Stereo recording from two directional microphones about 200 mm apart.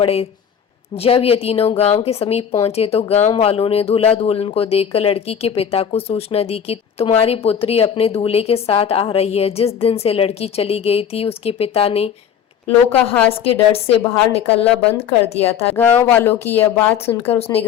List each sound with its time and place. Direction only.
0.0 s speech: 30° left (ahead or behind)
13.4 s speech: 30° left (ahead or behind)
14.6 s speech: 5° left (ahead or behind)
15.4 s speech: 30° left (ahead or behind)
16.0 s speech: 10° left (ahead or behind)